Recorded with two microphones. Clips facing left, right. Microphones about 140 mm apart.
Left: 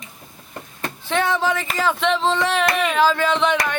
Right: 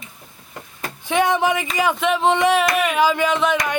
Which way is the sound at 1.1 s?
15° right (ahead or behind).